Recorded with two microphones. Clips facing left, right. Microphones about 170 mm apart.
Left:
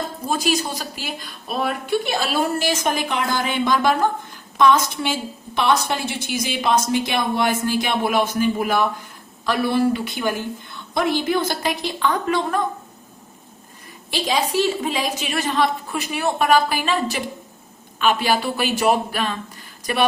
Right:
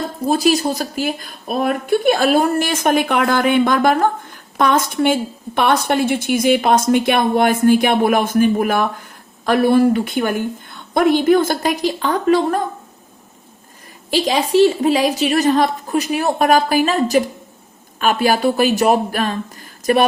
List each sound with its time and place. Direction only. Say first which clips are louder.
0.3 s a woman's voice: right 7 dB; 40° right (ahead or behind)
14.1 s a woman's voice: right 6 dB; 35° right (ahead or behind)